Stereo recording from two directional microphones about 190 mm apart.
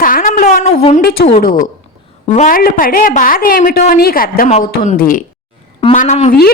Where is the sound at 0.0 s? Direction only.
45° left (ahead or behind).